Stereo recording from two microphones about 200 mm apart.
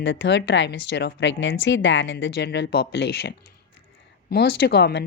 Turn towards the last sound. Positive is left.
turn(degrees=55)  # may be behind; listen again after turning